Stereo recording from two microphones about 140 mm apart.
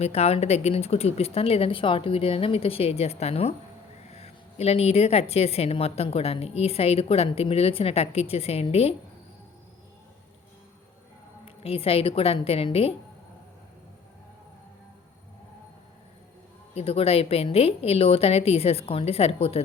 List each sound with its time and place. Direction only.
0.0 s a woman's voice: 50° left (ahead or behind)
11.4 s a woman's voice: 45° left (ahead or behind)
16.7 s a woman's voice: 45° left (ahead or behind)